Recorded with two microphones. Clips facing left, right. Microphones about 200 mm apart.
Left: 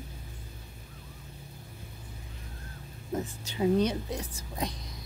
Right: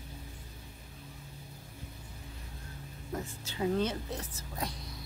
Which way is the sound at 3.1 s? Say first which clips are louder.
Left 5 dB; 20° left (ahead or behind).